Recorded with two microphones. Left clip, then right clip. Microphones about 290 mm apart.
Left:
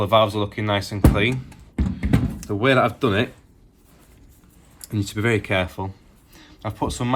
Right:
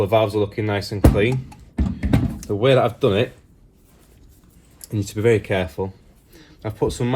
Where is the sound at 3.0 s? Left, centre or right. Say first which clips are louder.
Right 3 dB; left.